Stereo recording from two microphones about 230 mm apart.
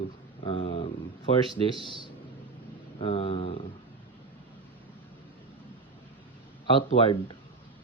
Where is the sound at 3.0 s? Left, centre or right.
Left.